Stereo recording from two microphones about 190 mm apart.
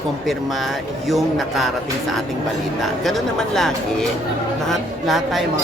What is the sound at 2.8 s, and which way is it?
Speech, centre (ahead or behind).